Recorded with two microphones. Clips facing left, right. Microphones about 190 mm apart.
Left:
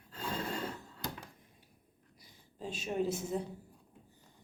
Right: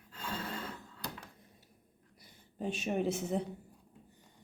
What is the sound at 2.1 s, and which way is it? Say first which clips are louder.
A woman's voice: right 6 dB; 55° right (ahead or behind).